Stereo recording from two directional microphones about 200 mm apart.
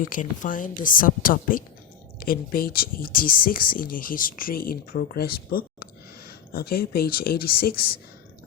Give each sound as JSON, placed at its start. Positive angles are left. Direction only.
{"t": 0.0, "sound": "speech", "side_deg": 40}